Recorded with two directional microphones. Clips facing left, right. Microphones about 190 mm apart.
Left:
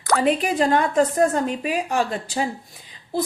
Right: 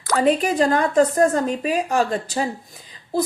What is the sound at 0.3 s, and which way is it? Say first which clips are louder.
A woman's voice: right 3 dB; 40° right (ahead or behind).